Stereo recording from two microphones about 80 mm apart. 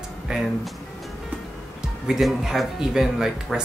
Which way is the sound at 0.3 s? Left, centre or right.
Centre.